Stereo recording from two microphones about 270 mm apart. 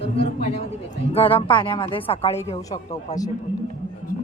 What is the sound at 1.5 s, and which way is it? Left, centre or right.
Speech, centre.